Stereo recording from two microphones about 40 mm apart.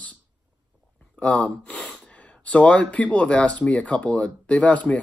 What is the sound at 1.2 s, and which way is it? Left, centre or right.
Speech, left.